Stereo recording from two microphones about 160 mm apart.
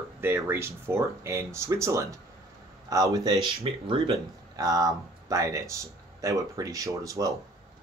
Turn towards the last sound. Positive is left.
turn(degrees=-20)  # may be behind; listen again after turning